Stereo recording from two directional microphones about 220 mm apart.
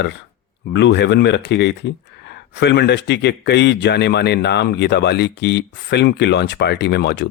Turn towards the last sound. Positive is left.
turn(degrees=50)  # may be behind; listen again after turning